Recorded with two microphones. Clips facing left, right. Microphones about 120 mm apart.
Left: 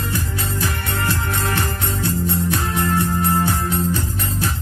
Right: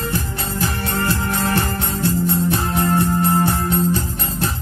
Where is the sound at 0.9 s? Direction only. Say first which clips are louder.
Right 3 dB; 30° right (ahead or behind).